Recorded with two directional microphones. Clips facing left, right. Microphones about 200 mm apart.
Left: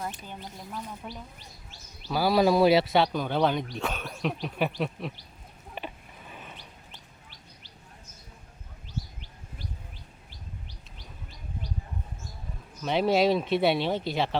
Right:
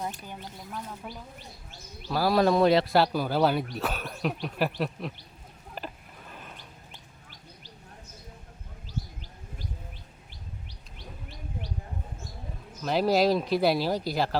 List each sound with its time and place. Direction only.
0.3 s speech: 5° left (ahead or behind)
5.7 s a sound: centre (ahead or behind)
10.9 s bird: 65° right (ahead or behind)
12.8 s speech: centre (ahead or behind)